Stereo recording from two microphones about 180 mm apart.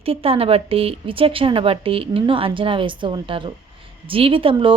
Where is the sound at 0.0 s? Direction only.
30° right (ahead or behind).